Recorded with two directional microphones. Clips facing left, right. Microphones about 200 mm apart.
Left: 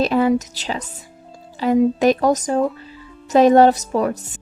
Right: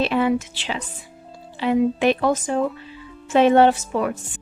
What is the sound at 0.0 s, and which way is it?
A woman's voice, 40° left (ahead or behind).